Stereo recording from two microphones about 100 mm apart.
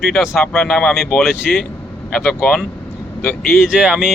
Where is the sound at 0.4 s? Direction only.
20° left (ahead or behind).